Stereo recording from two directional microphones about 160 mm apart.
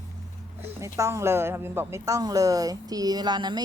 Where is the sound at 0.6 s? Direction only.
15° right (ahead or behind).